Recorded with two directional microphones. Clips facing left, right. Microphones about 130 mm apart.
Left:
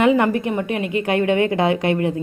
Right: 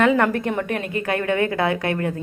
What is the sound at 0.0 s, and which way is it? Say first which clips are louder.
A woman's voice: left 2 dB; 15° left (ahead or behind).